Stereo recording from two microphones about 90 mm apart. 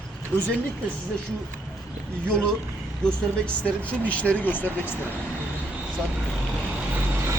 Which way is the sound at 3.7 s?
15° left (ahead or behind).